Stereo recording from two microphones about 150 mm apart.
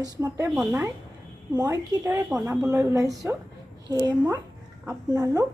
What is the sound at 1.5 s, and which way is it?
Speech, 25° right (ahead or behind).